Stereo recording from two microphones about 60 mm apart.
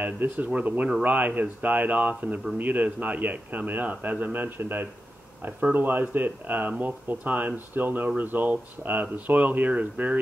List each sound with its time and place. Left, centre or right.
0.0 s speech: right